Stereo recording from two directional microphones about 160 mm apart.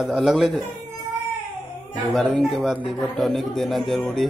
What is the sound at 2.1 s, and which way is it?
Speech, centre (ahead or behind).